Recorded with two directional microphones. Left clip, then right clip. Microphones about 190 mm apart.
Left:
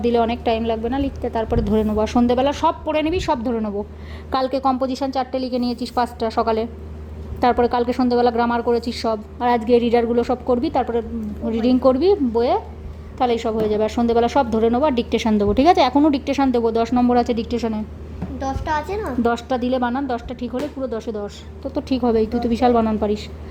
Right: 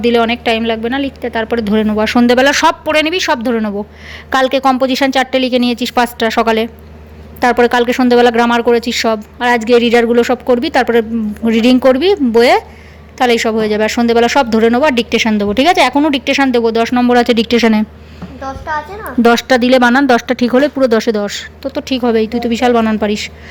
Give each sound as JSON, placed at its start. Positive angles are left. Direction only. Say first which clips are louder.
{"t": 0.0, "sound": "speech", "louder": "right 7 dB", "side_deg": 0}
{"t": 12.3, "sound": "speech", "louder": "right 10 dB", "side_deg": -15}
{"t": 13.1, "sound": "speech", "louder": "right 8 dB", "side_deg": -5}
{"t": 18.3, "sound": "a woman's voice", "louder": "right 3 dB", "side_deg": 40}
{"t": 19.2, "sound": "speech", "louder": "right 13 dB", "side_deg": -10}
{"t": 21.2, "sound": "speech", "louder": "right 11 dB", "side_deg": -10}
{"t": 21.8, "sound": "speech", "louder": "right 5 dB", "side_deg": 5}